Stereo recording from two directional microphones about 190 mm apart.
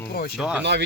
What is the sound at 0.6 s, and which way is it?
Speech, 65° right (ahead or behind).